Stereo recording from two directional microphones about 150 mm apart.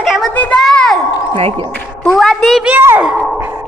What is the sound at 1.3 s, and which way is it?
Speech, 40° right (ahead or behind).